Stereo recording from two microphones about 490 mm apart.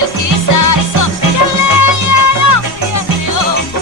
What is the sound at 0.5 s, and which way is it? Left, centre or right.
Music, left.